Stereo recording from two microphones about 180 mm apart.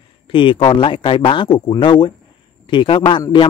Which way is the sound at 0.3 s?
30° left (ahead or behind).